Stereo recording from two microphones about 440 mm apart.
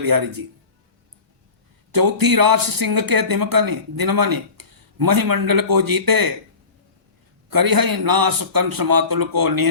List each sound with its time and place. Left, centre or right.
0.0 s speech: right
1.9 s speech: right
7.5 s speech: right